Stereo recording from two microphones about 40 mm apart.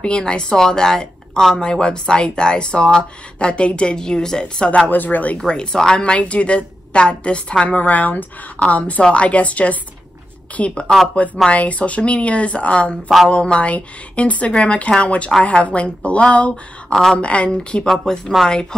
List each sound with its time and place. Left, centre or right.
0.0 s speech: left
4.8 s speech: left
5.4 s speech: centre
6.0 s speech: left
7.6 s speech: left
16.9 s speech: centre
17.2 s speech: left
17.8 s speech: centre
18.5 s speech: left